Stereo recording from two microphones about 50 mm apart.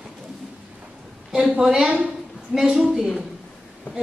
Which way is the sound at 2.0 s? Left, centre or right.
Centre.